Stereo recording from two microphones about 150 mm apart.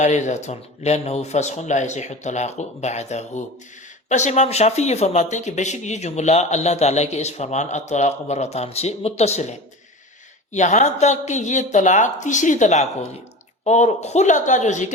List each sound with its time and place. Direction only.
0.0 s speech: 50° left (ahead or behind)